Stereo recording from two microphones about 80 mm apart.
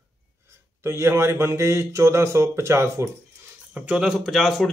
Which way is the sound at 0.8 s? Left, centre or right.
Right.